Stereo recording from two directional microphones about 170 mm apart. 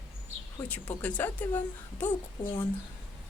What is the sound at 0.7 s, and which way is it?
A woman's voice, 10° left (ahead or behind).